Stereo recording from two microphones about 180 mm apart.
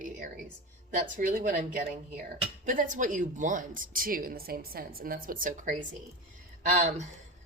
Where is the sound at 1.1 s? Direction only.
50° right (ahead or behind).